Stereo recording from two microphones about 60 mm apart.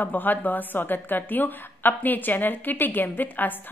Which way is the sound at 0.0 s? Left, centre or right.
Left.